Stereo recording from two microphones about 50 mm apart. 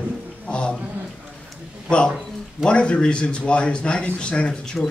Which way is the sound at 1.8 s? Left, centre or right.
Left.